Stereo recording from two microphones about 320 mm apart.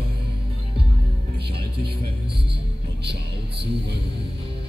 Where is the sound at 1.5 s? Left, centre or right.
Right.